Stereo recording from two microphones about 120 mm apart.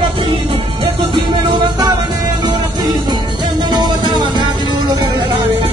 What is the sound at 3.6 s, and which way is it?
Music, 40° right (ahead or behind).